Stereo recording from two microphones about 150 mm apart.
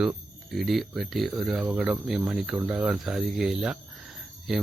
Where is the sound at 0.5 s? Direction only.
Centre (ahead or behind).